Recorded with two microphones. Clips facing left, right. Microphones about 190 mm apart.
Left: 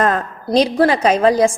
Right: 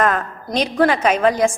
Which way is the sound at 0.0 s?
30° left (ahead or behind).